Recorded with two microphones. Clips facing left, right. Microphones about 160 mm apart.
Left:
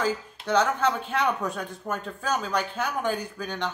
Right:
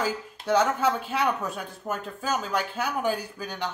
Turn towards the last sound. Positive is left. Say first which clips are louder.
# left 2 dB
turn(degrees=-10)  # may be behind; listen again after turning